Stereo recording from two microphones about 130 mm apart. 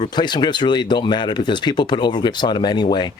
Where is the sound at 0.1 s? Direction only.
35° left (ahead or behind).